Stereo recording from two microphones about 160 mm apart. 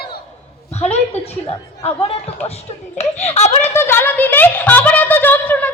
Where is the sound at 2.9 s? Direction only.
40° left (ahead or behind).